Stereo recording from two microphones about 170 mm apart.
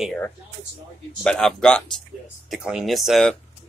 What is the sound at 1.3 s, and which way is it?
Speech, 5° left (ahead or behind).